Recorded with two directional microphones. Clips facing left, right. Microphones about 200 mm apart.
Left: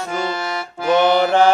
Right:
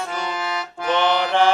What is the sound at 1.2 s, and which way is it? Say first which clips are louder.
Music: left 4 dB; 45° left (ahead or behind).